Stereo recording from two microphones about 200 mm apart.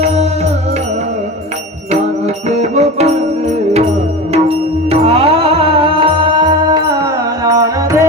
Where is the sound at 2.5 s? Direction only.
35° right (ahead or behind).